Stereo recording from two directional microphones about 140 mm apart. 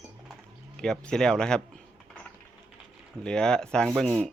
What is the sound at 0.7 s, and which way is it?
Speech, 5° left (ahead or behind).